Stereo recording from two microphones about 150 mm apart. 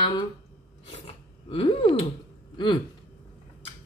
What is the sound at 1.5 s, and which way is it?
Speech, 40° left (ahead or behind).